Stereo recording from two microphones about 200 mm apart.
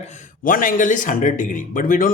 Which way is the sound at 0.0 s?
35° left (ahead or behind).